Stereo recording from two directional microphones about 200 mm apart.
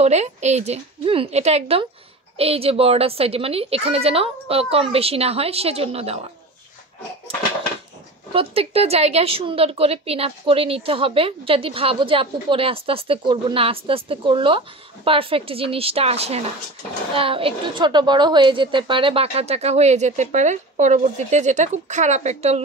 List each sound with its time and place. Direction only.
0.0 s a woman's voice: 35° right (ahead or behind)
8.3 s a woman's voice: 30° right (ahead or behind)